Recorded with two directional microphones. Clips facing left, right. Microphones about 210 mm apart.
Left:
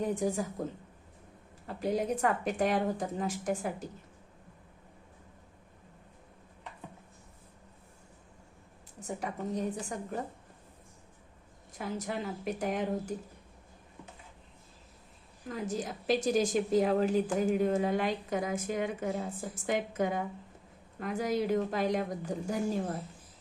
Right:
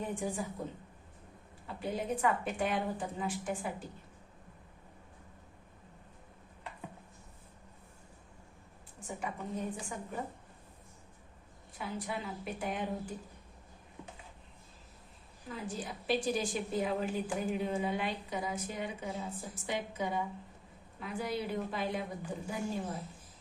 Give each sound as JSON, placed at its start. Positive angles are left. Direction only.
{"t": 0.0, "sound": "speech", "side_deg": 40}
{"t": 1.6, "sound": "speech", "side_deg": 40}
{"t": 9.0, "sound": "speech", "side_deg": 40}
{"t": 11.8, "sound": "a woman's voice", "side_deg": 45}
{"t": 15.4, "sound": "a woman's voice", "side_deg": 45}